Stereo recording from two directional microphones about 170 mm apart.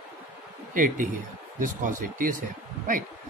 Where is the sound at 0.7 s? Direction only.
50° right (ahead or behind).